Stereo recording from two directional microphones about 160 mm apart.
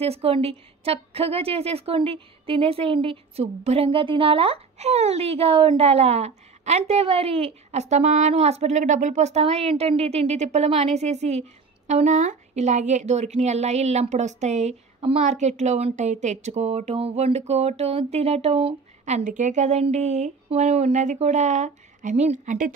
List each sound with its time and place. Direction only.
0.0 s a woman's voice: 40° right (ahead or behind)